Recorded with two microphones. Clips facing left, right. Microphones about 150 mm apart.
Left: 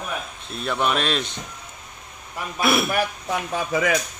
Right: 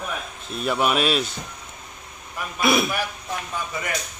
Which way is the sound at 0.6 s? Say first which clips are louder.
Right 2 dB; 5° right (ahead or behind).